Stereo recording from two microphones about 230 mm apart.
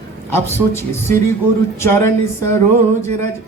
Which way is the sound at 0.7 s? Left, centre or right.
Centre.